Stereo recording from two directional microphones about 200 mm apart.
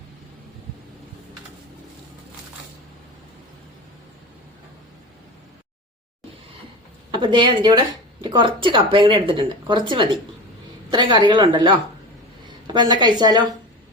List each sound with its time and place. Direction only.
7.1 s speech: 25° right (ahead or behind)